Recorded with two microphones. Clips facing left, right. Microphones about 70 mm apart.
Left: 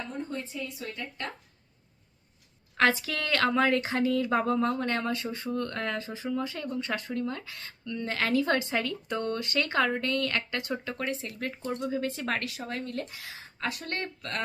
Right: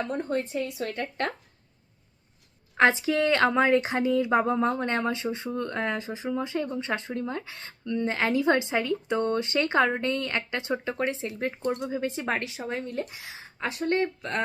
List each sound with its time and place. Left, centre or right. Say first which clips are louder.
0.1 s speech: right 7 dB; right
2.7 s speech: right 4 dB; right